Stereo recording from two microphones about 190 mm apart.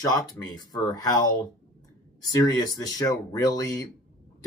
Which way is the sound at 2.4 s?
20° left (ahead or behind).